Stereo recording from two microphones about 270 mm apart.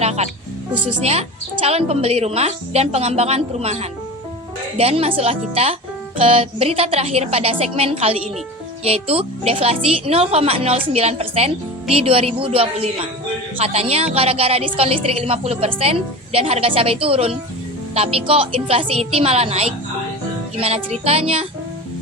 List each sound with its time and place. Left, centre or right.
0.0 s music: right
0.9 s a woman's voice: right